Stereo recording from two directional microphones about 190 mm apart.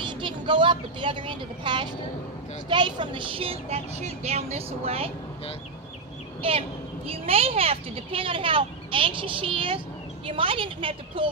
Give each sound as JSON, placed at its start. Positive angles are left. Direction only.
{"t": 0.0, "sound": "speech", "side_deg": -25}
{"t": 6.4, "sound": "a child's voice", "side_deg": -30}